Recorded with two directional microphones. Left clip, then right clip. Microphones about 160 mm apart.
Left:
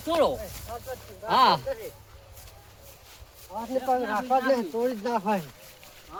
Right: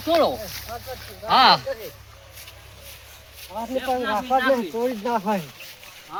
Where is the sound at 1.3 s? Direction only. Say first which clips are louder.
Right 5 dB; 90° left.